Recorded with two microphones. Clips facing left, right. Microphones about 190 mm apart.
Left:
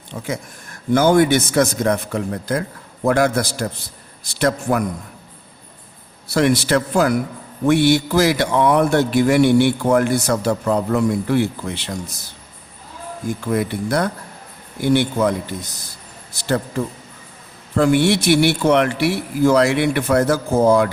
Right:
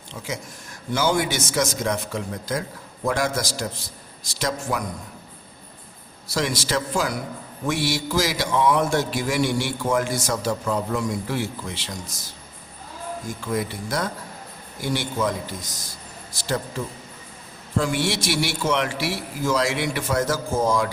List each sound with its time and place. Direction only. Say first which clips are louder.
0.1 s a man's voice: left 6 dB; 55° left (ahead or behind)
6.2 s a man's voice: left 9 dB; 60° left (ahead or behind)
13.5 s a man's voice: left 6 dB; 60° left (ahead or behind)
17.7 s a man's voice: left 8 dB; 60° left (ahead or behind)